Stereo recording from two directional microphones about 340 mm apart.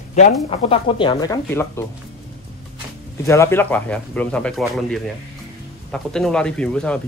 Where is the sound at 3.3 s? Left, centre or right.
Centre.